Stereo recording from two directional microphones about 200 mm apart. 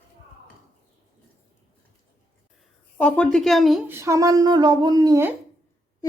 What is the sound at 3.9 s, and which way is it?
Speech, 15° right (ahead or behind).